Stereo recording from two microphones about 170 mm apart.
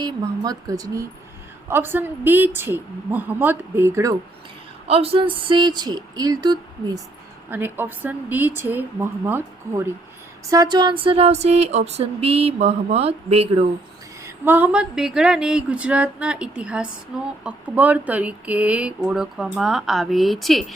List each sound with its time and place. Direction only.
0.0 s a woman's voice: 20° right (ahead or behind)
4.9 s speech: 35° right (ahead or behind)
7.5 s a woman's voice: 10° right (ahead or behind)
10.5 s a sound: 25° right (ahead or behind)
14.3 s speech: 10° right (ahead or behind)